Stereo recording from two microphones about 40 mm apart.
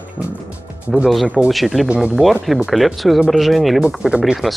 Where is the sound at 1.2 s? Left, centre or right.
Right.